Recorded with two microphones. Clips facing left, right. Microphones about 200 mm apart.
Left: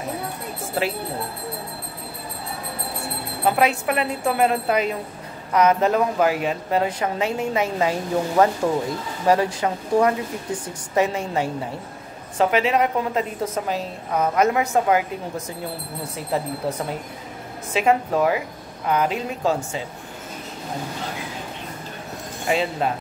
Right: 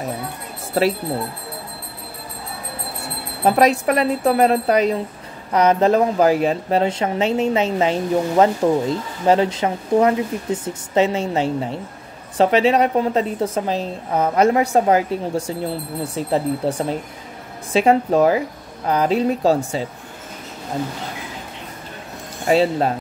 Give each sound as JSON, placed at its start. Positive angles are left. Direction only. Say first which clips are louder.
{"t": 3.4, "sound": "a woman's voice", "louder": "right 5 dB", "side_deg": -40}
{"t": 22.5, "sound": "a woman's voice", "louder": "right 6 dB", "side_deg": -35}